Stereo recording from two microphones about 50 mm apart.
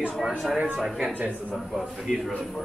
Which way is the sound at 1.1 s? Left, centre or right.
Right.